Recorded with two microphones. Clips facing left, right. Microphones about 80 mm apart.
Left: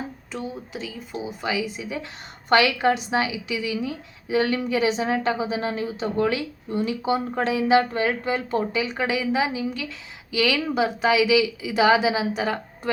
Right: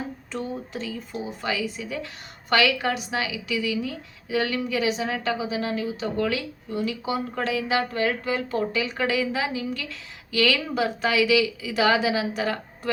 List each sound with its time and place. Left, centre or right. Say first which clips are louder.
0.3 s a woman's voice: right 2 dB; centre